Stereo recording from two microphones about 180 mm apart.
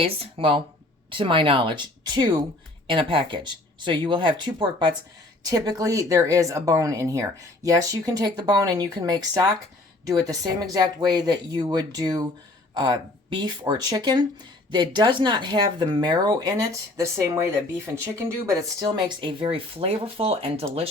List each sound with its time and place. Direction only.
0.0 s speech: 30° right (ahead or behind)